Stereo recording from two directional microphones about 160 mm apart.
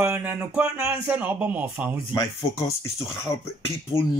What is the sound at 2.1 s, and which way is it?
Speech, 20° left (ahead or behind).